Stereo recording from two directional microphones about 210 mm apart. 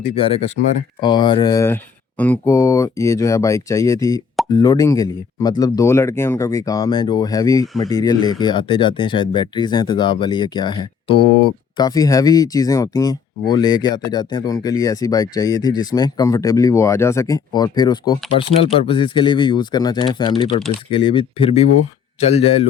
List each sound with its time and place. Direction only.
0.0 s speech: 25° left (ahead or behind)